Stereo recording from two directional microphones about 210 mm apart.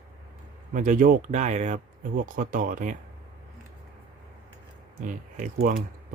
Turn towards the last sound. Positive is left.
turn(degrees=-40)  # may be behind; listen again after turning